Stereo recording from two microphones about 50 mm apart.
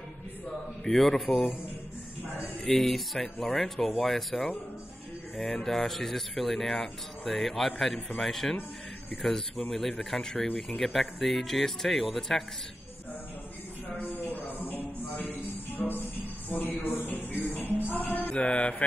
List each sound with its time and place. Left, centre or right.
0.8 s speech: centre
2.6 s speech: centre
13.9 s a sound: left
15.8 s speech: left
16.4 s a man's voice: left
16.8 s music: left
18.3 s mantra: left